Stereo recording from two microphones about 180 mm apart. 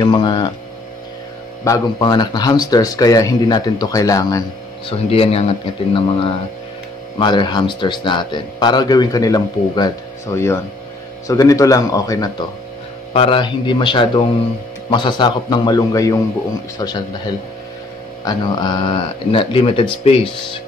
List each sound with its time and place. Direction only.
0.0 s speech: 25° left (ahead or behind)
1.6 s speech: 20° left (ahead or behind)
4.8 s speech: 35° left (ahead or behind)
18.2 s speech: 25° left (ahead or behind)